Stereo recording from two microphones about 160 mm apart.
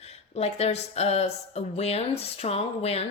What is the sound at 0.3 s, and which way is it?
A woman's voice, 40° left (ahead or behind).